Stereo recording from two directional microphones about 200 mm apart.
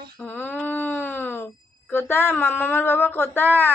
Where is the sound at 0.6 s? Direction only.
10° left (ahead or behind).